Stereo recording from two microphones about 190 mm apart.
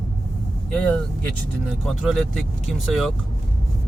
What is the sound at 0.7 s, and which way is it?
Speech, 5° left (ahead or behind).